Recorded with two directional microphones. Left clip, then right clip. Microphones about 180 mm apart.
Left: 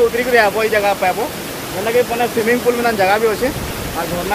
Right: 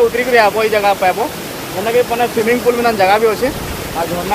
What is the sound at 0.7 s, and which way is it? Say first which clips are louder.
Speech: right 2 dB; 15° right (ahead or behind).